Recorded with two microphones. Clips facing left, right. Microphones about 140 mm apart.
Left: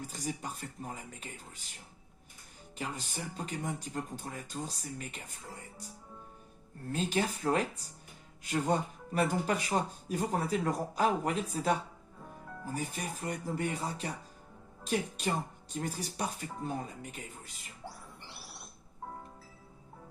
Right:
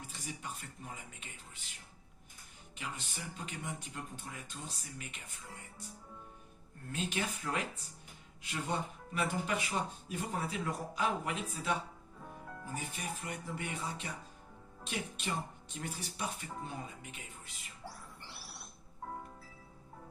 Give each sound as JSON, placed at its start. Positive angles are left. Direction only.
{"t": 0.1, "sound": "speech", "side_deg": 40}
{"t": 2.7, "sound": "speech", "side_deg": 40}
{"t": 6.9, "sound": "speech", "side_deg": 35}
{"t": 17.8, "sound": "rodents", "side_deg": 20}